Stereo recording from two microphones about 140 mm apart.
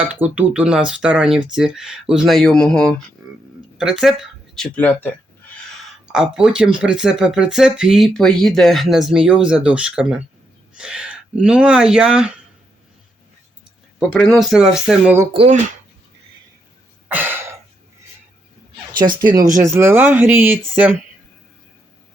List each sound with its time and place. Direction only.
0.1 s speech: 10° right (ahead or behind)
6.1 s speech: 5° right (ahead or behind)
14.1 s speech: 5° left (ahead or behind)
15.4 s speech: 55° right (ahead or behind)
17.1 s throat clearing: 15° right (ahead or behind)
19.0 s speech: 30° right (ahead or behind)